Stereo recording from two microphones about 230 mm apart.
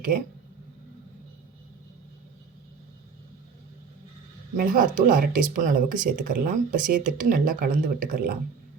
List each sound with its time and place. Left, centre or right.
4.5 s speech: right